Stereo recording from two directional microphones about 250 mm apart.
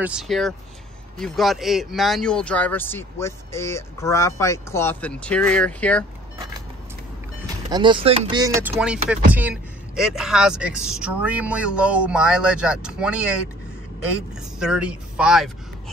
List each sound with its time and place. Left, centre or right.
0.0 s speech: centre
7.7 s chopping: centre
9.3 s speech: centre
14.6 s speech: centre